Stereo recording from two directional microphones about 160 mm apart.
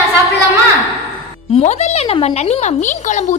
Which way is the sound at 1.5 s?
40° left (ahead or behind).